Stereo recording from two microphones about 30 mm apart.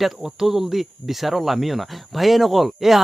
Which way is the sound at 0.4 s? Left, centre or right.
Centre.